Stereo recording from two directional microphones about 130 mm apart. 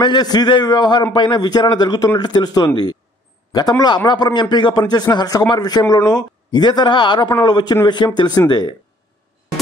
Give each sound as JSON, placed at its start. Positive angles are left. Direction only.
{"t": 0.0, "sound": "a man's voice", "side_deg": 35}